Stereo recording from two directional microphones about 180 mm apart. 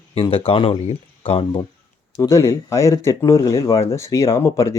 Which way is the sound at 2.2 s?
15° left (ahead or behind).